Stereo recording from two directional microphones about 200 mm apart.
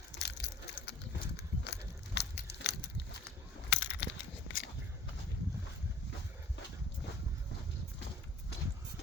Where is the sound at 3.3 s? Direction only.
60° left (ahead or behind).